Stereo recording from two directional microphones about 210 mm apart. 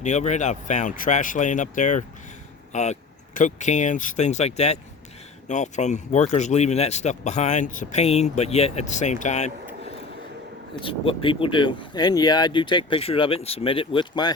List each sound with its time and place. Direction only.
0.0 s speech: 35° left (ahead or behind)
10.8 s speech: 25° left (ahead or behind)